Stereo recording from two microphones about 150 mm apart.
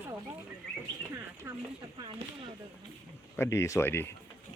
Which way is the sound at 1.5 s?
15° right (ahead or behind).